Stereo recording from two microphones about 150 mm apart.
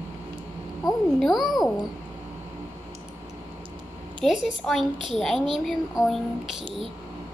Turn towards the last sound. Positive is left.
turn(degrees=-5)  # may be behind; listen again after turning